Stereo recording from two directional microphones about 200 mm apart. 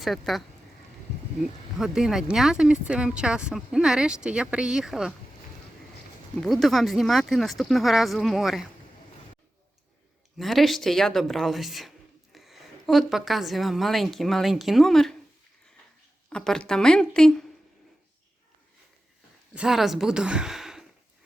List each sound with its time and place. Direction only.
0.0 s speech: centre (ahead or behind)
1.8 s speech: centre (ahead or behind)
6.4 s speech: centre (ahead or behind)
10.3 s speech: centre (ahead or behind)
16.3 s speech: 5° left (ahead or behind)
19.5 s speech: centre (ahead or behind)